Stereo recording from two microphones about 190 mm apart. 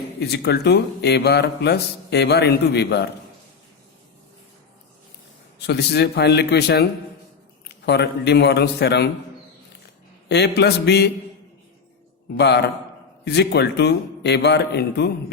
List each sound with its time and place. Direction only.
0.2 s speech: 60° left (ahead or behind)
5.6 s speech: 60° left (ahead or behind)
10.2 s speech: 60° left (ahead or behind)
12.4 s speech: 60° left (ahead or behind)